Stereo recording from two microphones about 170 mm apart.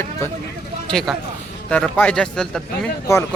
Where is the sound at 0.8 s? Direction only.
5° left (ahead or behind).